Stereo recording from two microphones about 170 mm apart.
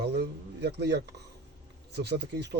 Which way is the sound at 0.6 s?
75° right (ahead or behind).